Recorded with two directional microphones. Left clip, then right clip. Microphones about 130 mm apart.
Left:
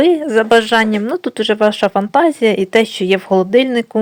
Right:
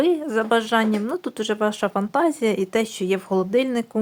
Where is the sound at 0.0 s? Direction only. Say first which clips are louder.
Left 9 dB; 25° left (ahead or behind).